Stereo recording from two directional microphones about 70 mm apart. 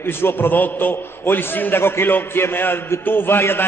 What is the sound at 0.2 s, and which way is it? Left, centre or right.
A man's voice, left.